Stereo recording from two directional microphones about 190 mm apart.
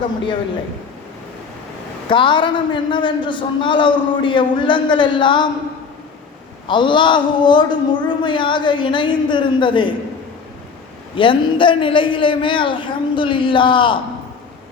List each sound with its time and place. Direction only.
2.0 s a man's voice: 25° left (ahead or behind)
6.7 s a man's voice: 25° left (ahead or behind)
11.1 s a man's voice: 25° left (ahead or behind)